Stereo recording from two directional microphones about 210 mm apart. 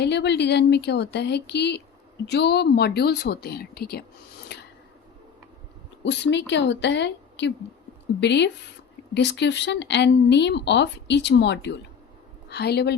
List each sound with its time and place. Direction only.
0.0 s speech: 55° left (ahead or behind)
4.5 s filing: 50° left (ahead or behind)
6.1 s a woman's voice: 55° left (ahead or behind)